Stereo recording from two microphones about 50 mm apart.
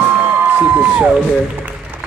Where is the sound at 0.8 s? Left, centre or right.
Right.